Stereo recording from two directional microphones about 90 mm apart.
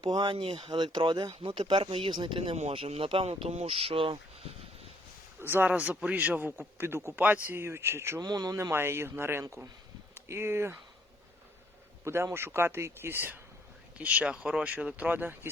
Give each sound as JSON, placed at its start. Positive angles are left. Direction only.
{"t": 0.0, "sound": "speech", "side_deg": -55}
{"t": 0.3, "sound": "speech", "side_deg": -75}
{"t": 0.6, "sound": "speech", "side_deg": -50}
{"t": 5.4, "sound": "speech", "side_deg": -25}
{"t": 8.2, "sound": "speech", "side_deg": -45}
{"t": 8.7, "sound": "speech", "side_deg": -25}
{"t": 12.0, "sound": "speech", "side_deg": -30}